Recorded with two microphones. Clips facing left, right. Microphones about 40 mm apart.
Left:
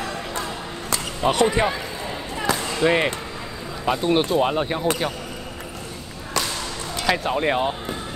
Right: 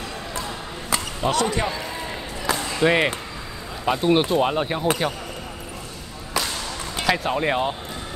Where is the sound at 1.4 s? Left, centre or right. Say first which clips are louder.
Left 4 dB; left.